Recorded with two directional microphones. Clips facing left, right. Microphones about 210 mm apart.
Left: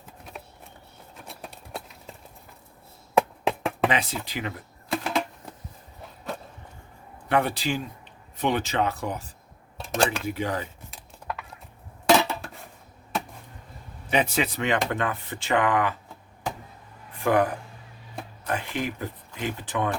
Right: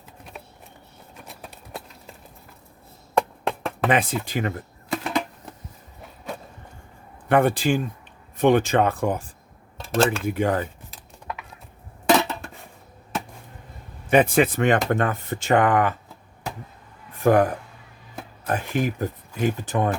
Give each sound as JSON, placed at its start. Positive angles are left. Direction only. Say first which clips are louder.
{"t": 1.3, "sound": "a sound", "louder": "even", "side_deg": 0}
{"t": 3.2, "sound": "chop", "louder": "left 1 dB", "side_deg": 0}
{"t": 3.8, "sound": "speech", "louder": "right 5 dB", "side_deg": -50}
{"t": 7.3, "sound": "speech", "louder": "right 6 dB", "side_deg": -50}
{"t": 12.0, "sound": "dishes", "louder": "right 1 dB", "side_deg": 0}
{"t": 14.1, "sound": "speech", "louder": "right 7 dB", "side_deg": -50}
{"t": 17.2, "sound": "speech", "louder": "right 4 dB", "side_deg": -45}